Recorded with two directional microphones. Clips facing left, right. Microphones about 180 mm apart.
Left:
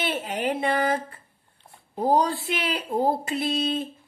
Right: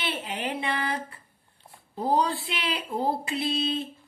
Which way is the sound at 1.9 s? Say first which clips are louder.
Left 3 dB; 45° left (ahead or behind).